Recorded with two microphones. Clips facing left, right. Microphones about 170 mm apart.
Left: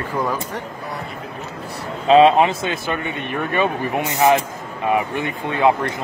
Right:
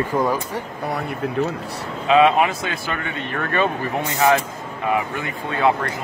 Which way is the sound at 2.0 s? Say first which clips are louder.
Left 3 dB; 30° left (ahead or behind).